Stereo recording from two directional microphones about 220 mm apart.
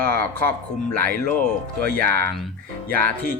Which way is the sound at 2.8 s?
40° right (ahead or behind).